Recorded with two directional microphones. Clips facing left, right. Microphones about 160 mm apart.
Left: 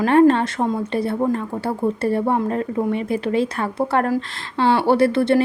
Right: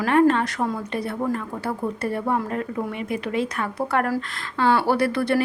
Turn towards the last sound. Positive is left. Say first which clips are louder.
# left 5 dB
turn(degrees=25)  # may be behind; listen again after turning